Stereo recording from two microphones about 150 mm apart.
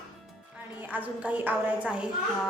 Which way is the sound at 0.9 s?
10° right (ahead or behind).